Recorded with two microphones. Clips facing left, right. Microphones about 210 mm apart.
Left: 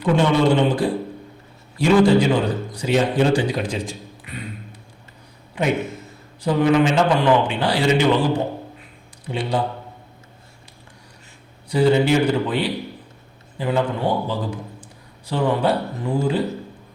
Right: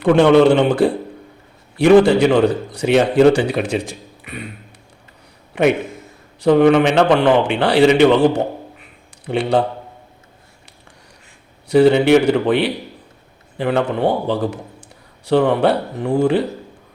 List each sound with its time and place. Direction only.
0.0 s a man's voice: 70° right (ahead or behind)
6.4 s a man's voice: 70° right (ahead or behind)
9.3 s a man's voice: 75° right (ahead or behind)
11.7 s a man's voice: 70° right (ahead or behind)